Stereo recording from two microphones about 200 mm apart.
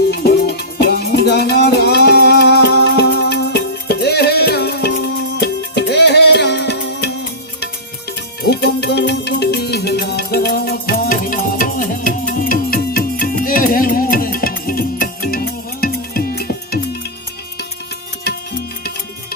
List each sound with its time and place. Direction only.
0.1 s music: 50° left (ahead or behind)
8.4 s music: 55° left (ahead or behind)